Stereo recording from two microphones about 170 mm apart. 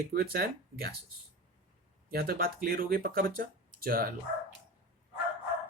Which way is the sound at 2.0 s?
60° right (ahead or behind).